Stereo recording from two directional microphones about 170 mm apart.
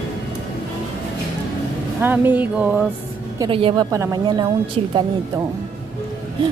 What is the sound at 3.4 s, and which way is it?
A woman's voice, 30° right (ahead or behind).